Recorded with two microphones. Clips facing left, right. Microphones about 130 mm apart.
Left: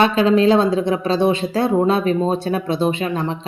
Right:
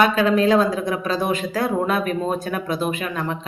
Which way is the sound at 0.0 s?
25° left (ahead or behind).